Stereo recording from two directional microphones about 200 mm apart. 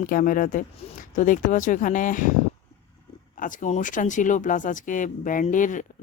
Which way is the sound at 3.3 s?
40° left (ahead or behind).